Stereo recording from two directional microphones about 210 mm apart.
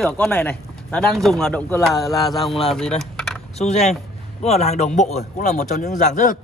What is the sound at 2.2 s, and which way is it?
Speech, centre (ahead or behind).